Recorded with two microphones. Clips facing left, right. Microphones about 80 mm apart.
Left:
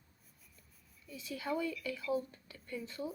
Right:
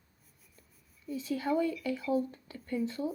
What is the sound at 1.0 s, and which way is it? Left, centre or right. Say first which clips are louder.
Speech: right 8 dB; right.